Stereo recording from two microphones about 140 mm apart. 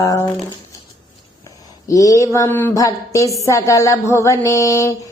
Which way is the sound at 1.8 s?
25° left (ahead or behind).